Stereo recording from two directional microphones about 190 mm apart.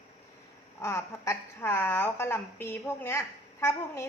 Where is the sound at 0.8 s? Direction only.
15° left (ahead or behind).